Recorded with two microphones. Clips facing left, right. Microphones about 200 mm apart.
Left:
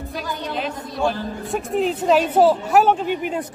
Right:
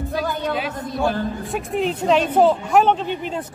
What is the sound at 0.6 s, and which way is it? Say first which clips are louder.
A woman's voice: right 1 dB; centre (ahead or behind).